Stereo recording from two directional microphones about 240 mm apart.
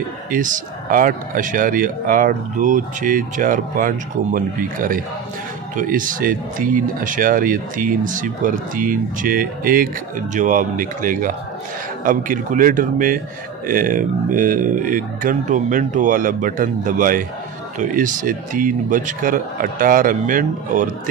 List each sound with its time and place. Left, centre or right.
0.3 s speech: right